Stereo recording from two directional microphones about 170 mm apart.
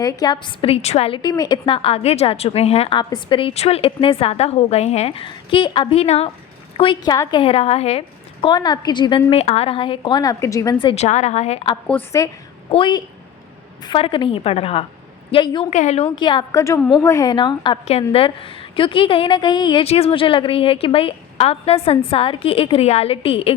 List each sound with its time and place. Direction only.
0.0 s a woman's voice: 25° left (ahead or behind)
10.9 s a woman's voice: 40° left (ahead or behind)
11.9 s a woman's voice: 15° left (ahead or behind)
12.7 s a woman's voice: 30° left (ahead or behind)
15.7 s a woman's voice: 45° left (ahead or behind)
16.1 s a woman's voice: 25° left (ahead or behind)